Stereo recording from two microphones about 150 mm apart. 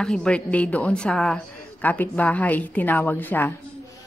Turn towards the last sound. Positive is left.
turn(degrees=10)  # may be behind; listen again after turning